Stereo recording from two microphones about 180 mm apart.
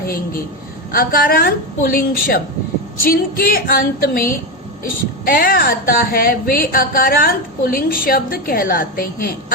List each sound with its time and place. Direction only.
0.9 s a woman's voice: 55° left (ahead or behind)